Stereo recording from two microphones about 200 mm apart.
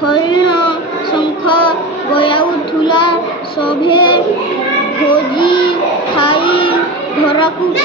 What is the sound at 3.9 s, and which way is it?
Child singing, 25° left (ahead or behind).